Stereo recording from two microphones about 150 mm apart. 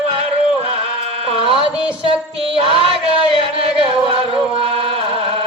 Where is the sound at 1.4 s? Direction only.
35° right (ahead or behind).